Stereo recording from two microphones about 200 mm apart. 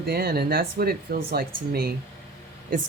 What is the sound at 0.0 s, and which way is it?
Speech, 50° right (ahead or behind).